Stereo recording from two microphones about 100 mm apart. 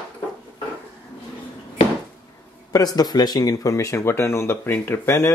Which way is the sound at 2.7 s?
40° left (ahead or behind).